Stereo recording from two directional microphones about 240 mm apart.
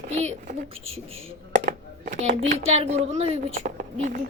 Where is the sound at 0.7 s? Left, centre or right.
Right.